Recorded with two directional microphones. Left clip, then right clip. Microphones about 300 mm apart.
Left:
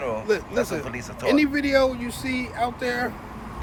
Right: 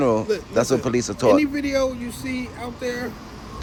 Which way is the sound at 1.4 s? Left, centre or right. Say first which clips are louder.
Left 1 dB; centre.